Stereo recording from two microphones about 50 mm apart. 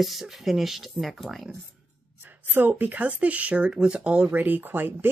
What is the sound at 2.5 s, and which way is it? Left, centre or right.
Speech, right.